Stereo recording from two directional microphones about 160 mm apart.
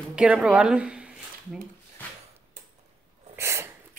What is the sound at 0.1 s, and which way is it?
Speech, 5° right (ahead or behind).